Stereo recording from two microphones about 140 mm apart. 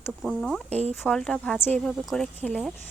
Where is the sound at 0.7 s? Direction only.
50° right (ahead or behind).